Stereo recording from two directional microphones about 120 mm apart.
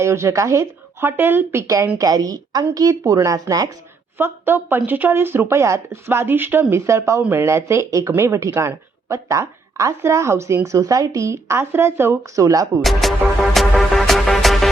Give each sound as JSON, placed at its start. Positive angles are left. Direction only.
{"t": 0.0, "sound": "a woman's voice", "side_deg": -25}
{"t": 4.2, "sound": "a woman's voice", "side_deg": -20}
{"t": 12.8, "sound": "music", "side_deg": 0}